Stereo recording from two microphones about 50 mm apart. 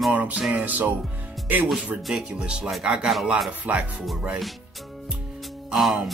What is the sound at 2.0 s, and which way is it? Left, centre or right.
Speech, centre.